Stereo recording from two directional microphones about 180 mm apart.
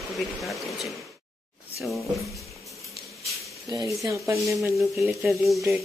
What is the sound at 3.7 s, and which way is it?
Speech, 15° right (ahead or behind).